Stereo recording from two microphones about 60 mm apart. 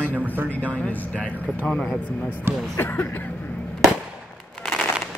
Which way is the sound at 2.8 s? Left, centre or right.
Left.